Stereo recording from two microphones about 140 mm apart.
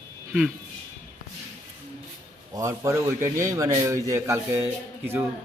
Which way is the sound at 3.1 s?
70° right (ahead or behind).